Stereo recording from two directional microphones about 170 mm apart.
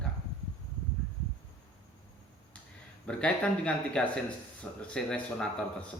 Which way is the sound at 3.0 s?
5° left (ahead or behind).